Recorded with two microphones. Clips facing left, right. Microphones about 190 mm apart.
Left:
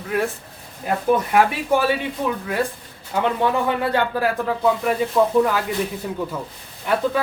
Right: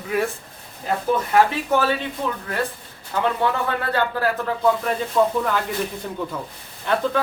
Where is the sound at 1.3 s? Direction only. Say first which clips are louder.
Even; 10° left (ahead or behind).